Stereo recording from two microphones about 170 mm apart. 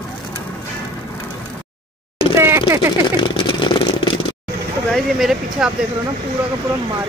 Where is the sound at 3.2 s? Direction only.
25° left (ahead or behind).